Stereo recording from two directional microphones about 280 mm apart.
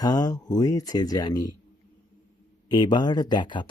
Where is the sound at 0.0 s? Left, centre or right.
Centre.